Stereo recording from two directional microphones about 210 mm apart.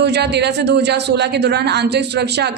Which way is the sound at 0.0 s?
50° right (ahead or behind).